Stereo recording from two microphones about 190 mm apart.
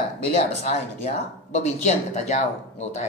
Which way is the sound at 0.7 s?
35° left (ahead or behind).